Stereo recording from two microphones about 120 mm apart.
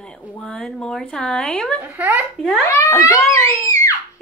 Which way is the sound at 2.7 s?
25° left (ahead or behind).